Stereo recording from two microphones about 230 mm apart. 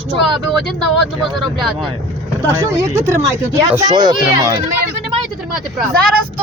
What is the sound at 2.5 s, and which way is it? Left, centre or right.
Speech, centre.